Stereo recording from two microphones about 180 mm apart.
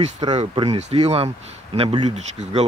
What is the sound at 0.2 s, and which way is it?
Speech, 25° right (ahead or behind).